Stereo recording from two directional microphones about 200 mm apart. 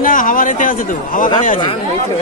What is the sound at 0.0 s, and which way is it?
Speech, 45° left (ahead or behind).